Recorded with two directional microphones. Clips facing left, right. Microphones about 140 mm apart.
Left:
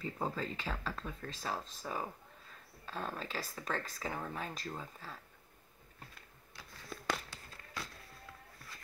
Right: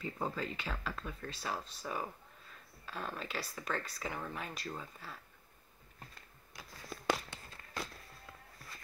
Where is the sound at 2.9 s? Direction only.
35° left (ahead or behind).